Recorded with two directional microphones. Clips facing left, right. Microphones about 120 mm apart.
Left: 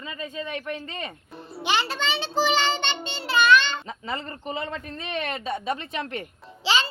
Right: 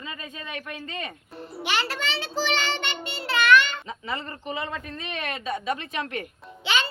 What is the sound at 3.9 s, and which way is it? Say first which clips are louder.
A woman's voice: even; 40° left (ahead or behind).